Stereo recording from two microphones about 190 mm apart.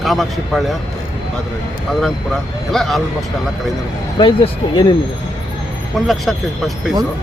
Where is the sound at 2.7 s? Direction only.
Centre (ahead or behind).